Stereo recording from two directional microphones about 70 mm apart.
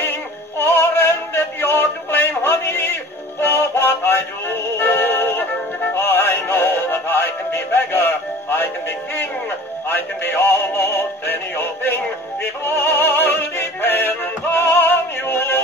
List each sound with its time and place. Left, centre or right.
0.6 s synthetic singing: left
4.7 s music: left
9.8 s synthetic singing: left